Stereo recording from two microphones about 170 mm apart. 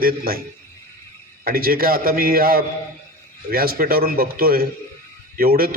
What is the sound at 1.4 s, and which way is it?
A man's voice, 60° right (ahead or behind).